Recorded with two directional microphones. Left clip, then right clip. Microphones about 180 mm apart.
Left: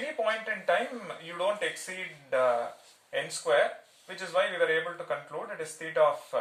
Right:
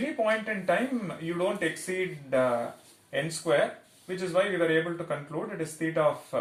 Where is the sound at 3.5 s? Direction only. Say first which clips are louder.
Left 1 dB; 15° left (ahead or behind).